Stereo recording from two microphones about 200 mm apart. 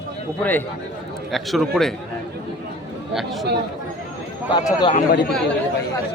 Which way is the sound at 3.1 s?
Centre (ahead or behind).